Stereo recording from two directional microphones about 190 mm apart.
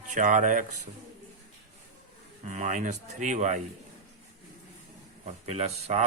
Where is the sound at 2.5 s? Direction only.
40° right (ahead or behind).